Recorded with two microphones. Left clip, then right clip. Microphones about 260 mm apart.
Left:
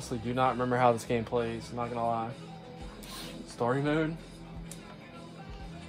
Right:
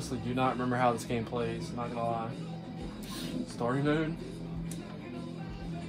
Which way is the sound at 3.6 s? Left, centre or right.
Left.